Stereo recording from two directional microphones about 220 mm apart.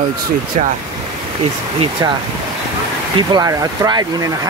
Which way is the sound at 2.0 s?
15° right (ahead or behind).